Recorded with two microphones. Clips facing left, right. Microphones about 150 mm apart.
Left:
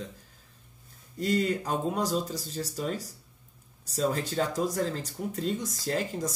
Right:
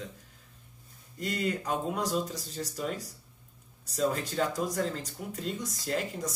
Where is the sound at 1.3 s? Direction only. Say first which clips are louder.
Left 4 dB; 35° left (ahead or behind).